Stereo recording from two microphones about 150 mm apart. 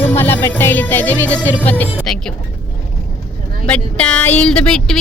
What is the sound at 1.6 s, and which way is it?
Speech, 10° left (ahead or behind).